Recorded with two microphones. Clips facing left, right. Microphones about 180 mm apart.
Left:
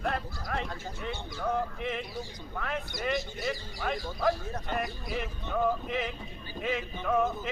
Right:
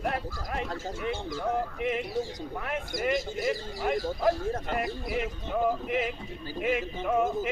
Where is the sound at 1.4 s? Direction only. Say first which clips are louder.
Left 1 dB; 15° right (ahead or behind).